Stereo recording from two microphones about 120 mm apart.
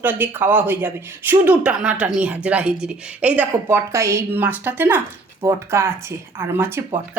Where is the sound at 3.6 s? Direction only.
25° right (ahead or behind).